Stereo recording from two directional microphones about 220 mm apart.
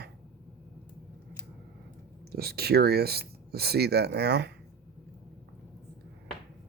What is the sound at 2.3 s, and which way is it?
Speech, 45° right (ahead or behind).